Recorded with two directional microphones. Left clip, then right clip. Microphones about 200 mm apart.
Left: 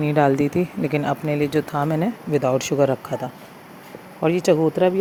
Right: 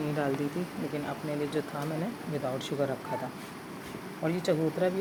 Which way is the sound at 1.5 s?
45° left (ahead or behind).